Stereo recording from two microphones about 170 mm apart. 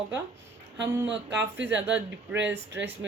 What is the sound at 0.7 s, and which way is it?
A woman's voice, 90° right.